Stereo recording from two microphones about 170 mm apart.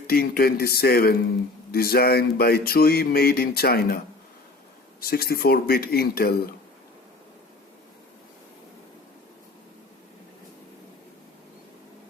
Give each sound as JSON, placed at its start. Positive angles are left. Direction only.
{"t": 0.1, "sound": "speech", "side_deg": 65}